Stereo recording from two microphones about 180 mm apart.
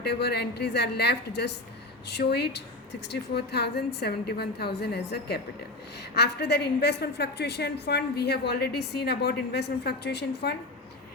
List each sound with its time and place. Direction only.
0.0 s a woman's voice: 65° left (ahead or behind)